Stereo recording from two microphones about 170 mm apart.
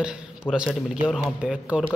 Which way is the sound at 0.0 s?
5° right (ahead or behind).